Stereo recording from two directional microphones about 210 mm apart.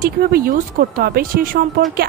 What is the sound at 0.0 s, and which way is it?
Speech, 45° right (ahead or behind).